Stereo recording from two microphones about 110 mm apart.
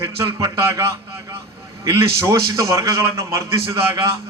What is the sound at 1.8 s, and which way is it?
A man's voice, 25° right (ahead or behind).